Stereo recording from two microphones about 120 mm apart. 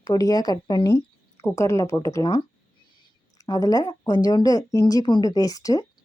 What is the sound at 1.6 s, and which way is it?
Speech, 25° left (ahead or behind).